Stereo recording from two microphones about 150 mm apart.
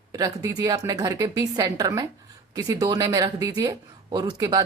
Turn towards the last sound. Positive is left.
turn(degrees=-30)  # may be behind; listen again after turning